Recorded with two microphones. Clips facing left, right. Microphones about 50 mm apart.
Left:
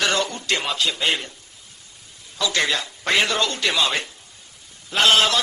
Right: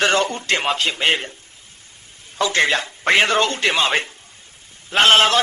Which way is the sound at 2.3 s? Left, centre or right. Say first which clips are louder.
Right 4 dB; right.